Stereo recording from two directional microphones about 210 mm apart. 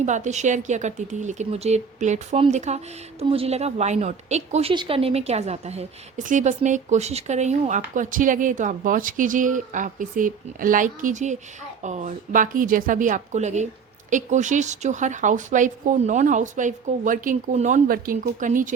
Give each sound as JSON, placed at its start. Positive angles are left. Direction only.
{"t": 0.0, "sound": "a woman's voice", "side_deg": -35}